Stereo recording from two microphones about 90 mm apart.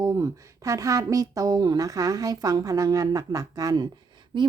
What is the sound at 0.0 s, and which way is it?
Speech, 35° right (ahead or behind).